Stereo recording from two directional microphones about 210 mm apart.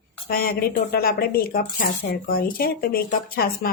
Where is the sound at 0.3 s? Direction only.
45° left (ahead or behind).